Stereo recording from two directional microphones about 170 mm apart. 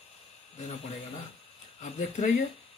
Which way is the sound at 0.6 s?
40° left (ahead or behind).